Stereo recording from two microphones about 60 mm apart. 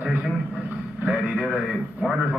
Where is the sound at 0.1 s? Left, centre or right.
Centre.